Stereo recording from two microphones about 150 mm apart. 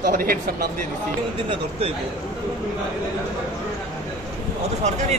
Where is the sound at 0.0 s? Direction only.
65° right (ahead or behind).